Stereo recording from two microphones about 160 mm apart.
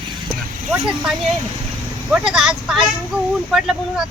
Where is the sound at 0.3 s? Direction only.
5° right (ahead or behind).